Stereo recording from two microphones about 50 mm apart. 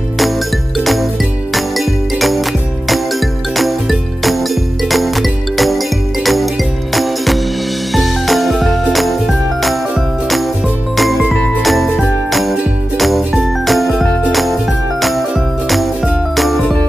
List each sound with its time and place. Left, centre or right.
0.7 s music: centre
7.9 s jingle: centre
11.0 s music: centre
11.6 s jingle bell: centre
12.9 s music: centre
16.3 s music: centre